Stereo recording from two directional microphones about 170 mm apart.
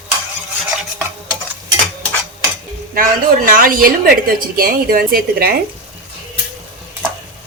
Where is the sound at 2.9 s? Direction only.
55° right (ahead or behind).